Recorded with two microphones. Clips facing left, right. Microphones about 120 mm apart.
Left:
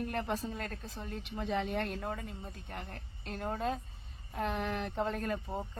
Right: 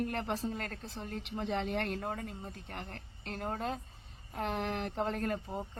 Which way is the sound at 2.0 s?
45° right (ahead or behind).